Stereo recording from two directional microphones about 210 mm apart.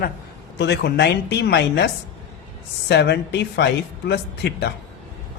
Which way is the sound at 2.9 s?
55° left (ahead or behind).